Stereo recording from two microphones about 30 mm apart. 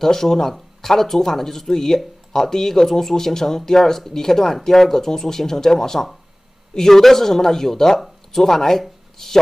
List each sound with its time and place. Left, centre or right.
0.0 s speech: centre